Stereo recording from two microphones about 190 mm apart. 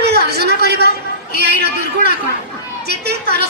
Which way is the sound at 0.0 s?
60° right (ahead or behind).